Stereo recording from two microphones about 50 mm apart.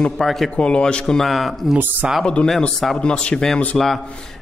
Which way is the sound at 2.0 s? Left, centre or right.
Right.